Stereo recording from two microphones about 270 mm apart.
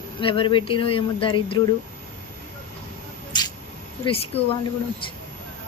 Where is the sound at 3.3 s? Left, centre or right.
Centre.